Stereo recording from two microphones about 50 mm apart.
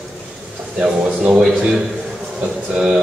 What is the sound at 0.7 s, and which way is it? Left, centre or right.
Speech, right.